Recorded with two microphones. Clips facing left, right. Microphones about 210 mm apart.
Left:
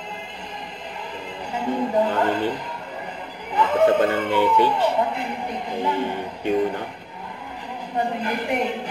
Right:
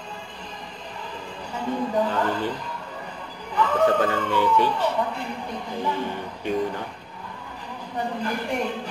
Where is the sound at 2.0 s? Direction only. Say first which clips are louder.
Left 3 dB; 20° left (ahead or behind).